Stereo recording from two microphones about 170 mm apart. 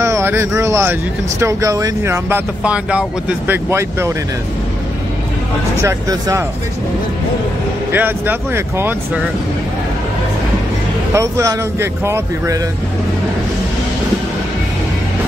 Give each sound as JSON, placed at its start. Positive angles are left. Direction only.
{"t": 0.0, "sound": "speech", "side_deg": -15}
{"t": 5.8, "sound": "speech", "side_deg": -20}
{"t": 7.9, "sound": "speech", "side_deg": -10}
{"t": 11.1, "sound": "speech", "side_deg": -15}